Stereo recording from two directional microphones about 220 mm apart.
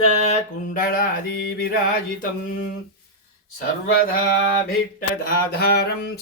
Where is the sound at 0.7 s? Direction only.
40° left (ahead or behind).